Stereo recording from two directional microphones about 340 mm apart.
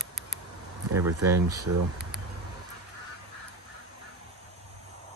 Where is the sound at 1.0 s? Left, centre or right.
Right.